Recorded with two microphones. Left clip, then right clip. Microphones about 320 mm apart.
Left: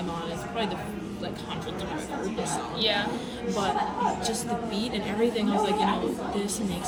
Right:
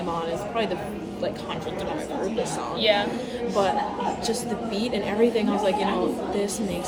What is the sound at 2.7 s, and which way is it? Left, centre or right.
Speech, centre.